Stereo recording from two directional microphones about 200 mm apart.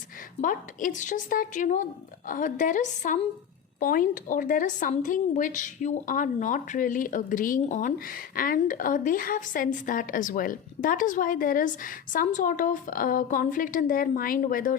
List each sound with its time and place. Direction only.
0.4 s a woman's voice: 40° left (ahead or behind)